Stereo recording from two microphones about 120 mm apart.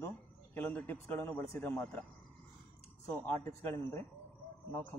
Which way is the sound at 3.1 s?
15° left (ahead or behind).